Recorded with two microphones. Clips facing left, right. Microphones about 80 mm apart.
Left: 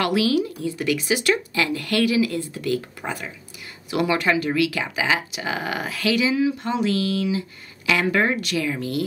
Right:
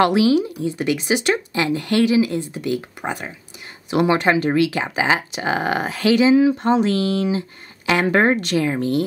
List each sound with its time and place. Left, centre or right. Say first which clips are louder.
0.0 s speech: right 5 dB; right